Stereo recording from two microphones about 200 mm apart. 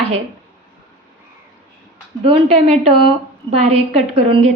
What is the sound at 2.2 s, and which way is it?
A woman's voice, 30° right (ahead or behind).